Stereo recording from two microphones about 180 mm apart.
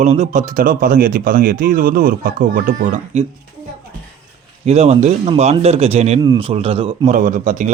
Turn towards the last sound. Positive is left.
turn(degrees=-45)  # may be behind; listen again after turning